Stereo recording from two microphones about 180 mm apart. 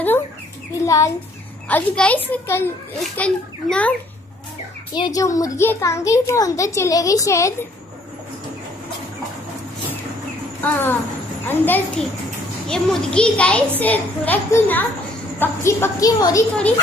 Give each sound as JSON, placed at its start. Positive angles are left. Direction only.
{"t": 0.8, "sound": "a child's voice", "side_deg": 20}
{"t": 4.9, "sound": "a child's voice", "side_deg": 20}
{"t": 10.6, "sound": "a child's voice", "side_deg": 10}